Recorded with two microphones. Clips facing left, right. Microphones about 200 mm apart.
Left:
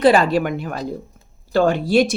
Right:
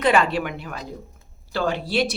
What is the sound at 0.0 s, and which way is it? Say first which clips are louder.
Speech: left 5 dB; 35° left (ahead or behind).